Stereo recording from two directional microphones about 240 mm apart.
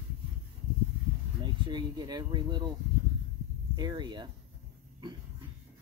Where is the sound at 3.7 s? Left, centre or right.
Centre.